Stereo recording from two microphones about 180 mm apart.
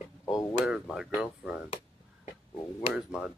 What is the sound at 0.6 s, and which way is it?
Speech, centre (ahead or behind).